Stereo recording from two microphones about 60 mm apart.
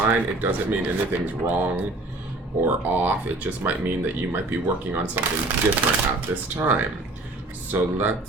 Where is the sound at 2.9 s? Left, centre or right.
Right.